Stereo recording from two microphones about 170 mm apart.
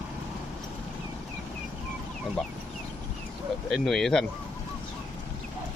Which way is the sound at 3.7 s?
Centre (ahead or behind).